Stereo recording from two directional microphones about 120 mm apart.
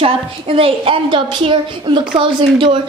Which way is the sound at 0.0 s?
50° right (ahead or behind).